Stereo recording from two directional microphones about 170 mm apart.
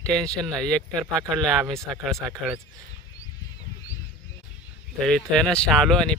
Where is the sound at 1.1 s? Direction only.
20° right (ahead or behind).